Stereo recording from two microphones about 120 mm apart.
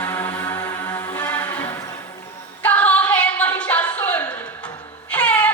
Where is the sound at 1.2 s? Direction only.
15° left (ahead or behind).